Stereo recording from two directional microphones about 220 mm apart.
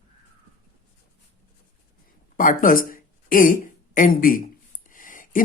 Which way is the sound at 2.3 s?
40° left (ahead or behind).